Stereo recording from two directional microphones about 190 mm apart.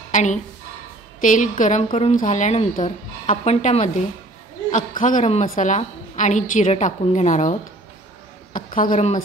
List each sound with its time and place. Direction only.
0.1 s a woman's voice: 40° left (ahead or behind)
8.5 s a woman's voice: 45° left (ahead or behind)